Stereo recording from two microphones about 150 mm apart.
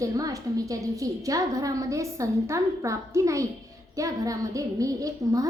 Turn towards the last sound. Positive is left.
turn(degrees=-25)  # may be behind; listen again after turning